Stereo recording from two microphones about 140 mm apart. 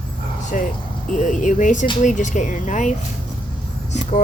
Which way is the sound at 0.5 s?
65° left (ahead or behind).